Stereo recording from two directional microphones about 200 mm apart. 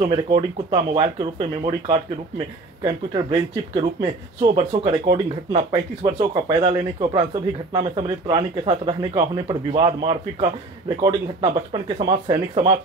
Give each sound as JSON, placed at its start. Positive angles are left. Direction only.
{"t": 0.0, "sound": "speech", "side_deg": -25}
{"t": 11.0, "sound": "speech", "side_deg": -20}